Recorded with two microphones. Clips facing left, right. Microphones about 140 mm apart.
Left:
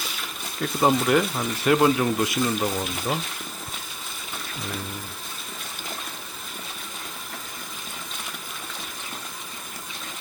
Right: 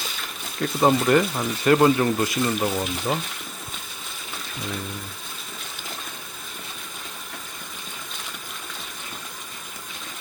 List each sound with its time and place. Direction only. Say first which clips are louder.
0.6 s speech: right 2 dB; centre (ahead or behind)